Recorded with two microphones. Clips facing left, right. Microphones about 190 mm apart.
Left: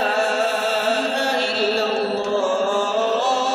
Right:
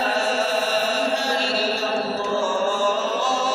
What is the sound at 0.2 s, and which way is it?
Chant, 55° left (ahead or behind).